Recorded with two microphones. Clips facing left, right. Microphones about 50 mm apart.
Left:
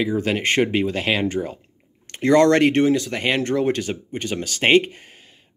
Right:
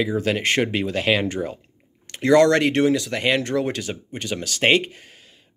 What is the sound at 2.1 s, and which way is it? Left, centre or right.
Speech, left.